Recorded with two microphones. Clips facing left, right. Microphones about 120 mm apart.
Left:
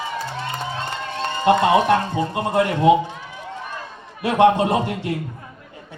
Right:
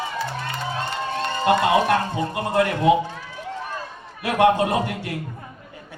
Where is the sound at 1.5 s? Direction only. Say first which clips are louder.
Left 3 dB; 25° left (ahead or behind).